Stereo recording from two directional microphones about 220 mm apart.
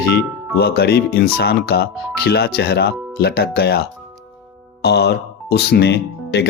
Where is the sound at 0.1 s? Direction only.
45° left (ahead or behind).